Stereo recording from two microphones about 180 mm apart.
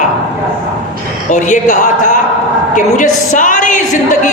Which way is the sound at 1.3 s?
45° left (ahead or behind).